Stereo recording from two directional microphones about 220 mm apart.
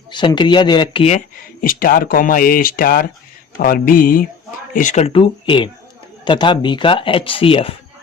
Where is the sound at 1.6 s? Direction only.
40° left (ahead or behind).